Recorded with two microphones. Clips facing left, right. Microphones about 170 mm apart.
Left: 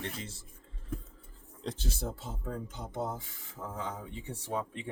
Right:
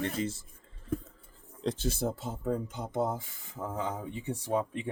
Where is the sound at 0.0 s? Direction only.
50° right (ahead or behind).